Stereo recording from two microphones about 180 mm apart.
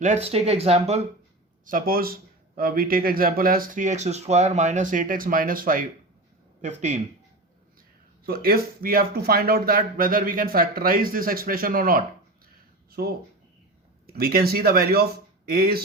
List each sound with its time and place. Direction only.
0.0 s speech: 35° right (ahead or behind)
1.6 s speech: 50° right (ahead or behind)
6.6 s speech: 40° right (ahead or behind)
8.3 s speech: 55° right (ahead or behind)